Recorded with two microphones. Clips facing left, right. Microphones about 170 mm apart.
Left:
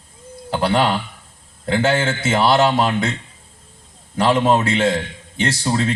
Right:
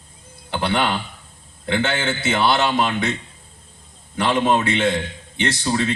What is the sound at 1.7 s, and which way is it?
A man's voice, 40° left (ahead or behind).